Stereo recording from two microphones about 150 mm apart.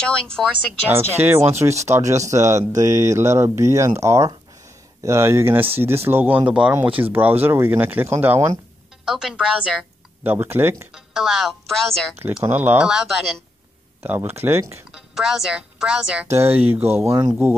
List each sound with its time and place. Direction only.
0.0 s speech: 5° left (ahead or behind)
0.5 s speech: 15° right (ahead or behind)
9.0 s speech: 5° right (ahead or behind)
10.9 s a woman's voice: 5° right (ahead or behind)
12.4 s a woman's voice: 10° right (ahead or behind)
14.0 s speech: 15° right (ahead or behind)
14.9 s speech: 5° right (ahead or behind)
16.9 s speech: 20° right (ahead or behind)